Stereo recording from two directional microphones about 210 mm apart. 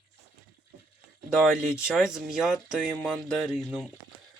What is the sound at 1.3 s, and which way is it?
Speech, 5° right (ahead or behind).